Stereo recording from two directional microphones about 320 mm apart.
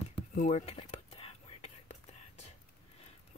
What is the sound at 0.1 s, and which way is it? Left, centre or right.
Whispering, left.